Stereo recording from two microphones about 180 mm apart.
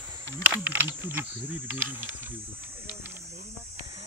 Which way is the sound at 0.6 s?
10° right (ahead or behind).